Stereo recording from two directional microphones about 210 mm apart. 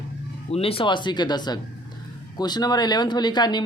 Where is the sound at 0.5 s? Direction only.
25° left (ahead or behind).